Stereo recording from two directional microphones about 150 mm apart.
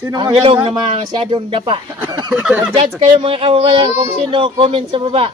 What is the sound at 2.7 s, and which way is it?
A man's voice, 40° right (ahead or behind).